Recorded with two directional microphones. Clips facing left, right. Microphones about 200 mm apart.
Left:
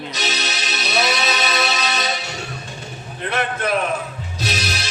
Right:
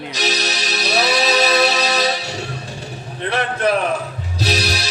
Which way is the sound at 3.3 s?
35° right (ahead or behind).